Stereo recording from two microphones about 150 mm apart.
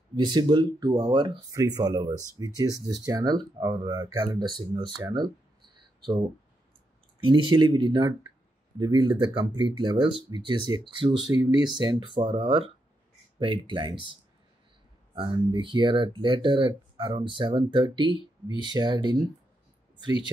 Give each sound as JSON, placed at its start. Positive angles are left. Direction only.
{"t": 0.1, "sound": "speech", "side_deg": -30}
{"t": 7.2, "sound": "speech", "side_deg": -35}
{"t": 15.1, "sound": "speech", "side_deg": -30}